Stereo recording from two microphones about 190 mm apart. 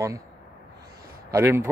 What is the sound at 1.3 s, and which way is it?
Speech, 15° right (ahead or behind).